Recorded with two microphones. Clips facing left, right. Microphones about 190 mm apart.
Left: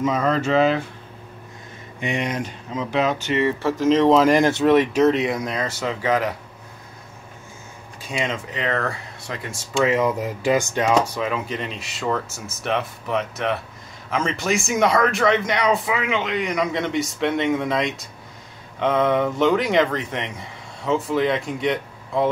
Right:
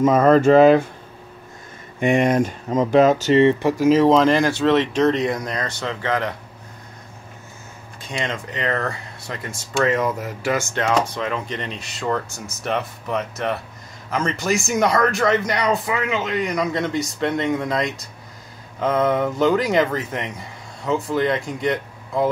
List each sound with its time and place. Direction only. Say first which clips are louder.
0.0 s speech: right 7 dB; 50° right (ahead or behind)
2.0 s speech: right 8 dB; 50° right (ahead or behind)
3.4 s speech: right 3 dB; 15° right (ahead or behind)
4.1 s speech: even; 5° left (ahead or behind)
4.4 s speech: left 1 dB; 20° left (ahead or behind)
8.1 s speech: left 1 dB; 5° left (ahead or behind)
9.8 s speech: left 1 dB; 15° left (ahead or behind)